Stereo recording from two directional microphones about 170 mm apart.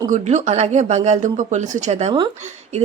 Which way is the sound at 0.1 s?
45° right (ahead or behind).